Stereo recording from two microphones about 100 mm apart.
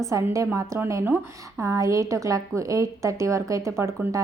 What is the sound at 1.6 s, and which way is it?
A woman's voice, 30° right (ahead or behind).